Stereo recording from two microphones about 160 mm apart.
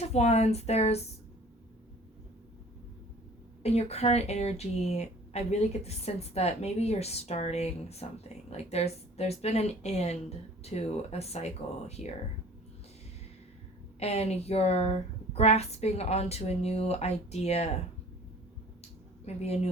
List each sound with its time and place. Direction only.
0.0 s speech: 40° left (ahead or behind)
3.6 s speech: 40° left (ahead or behind)
14.0 s speech: 40° left (ahead or behind)
18.8 s a sound: 40° left (ahead or behind)